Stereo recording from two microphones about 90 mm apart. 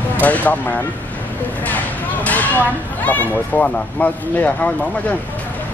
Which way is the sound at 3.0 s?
20° left (ahead or behind).